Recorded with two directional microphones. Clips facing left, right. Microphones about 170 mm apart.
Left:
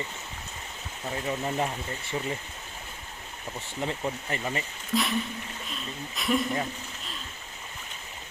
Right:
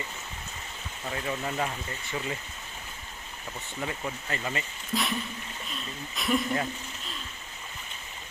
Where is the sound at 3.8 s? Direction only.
20° left (ahead or behind).